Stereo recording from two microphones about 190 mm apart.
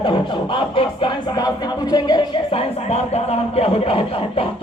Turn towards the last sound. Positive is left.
turn(degrees=30)  # may be behind; listen again after turning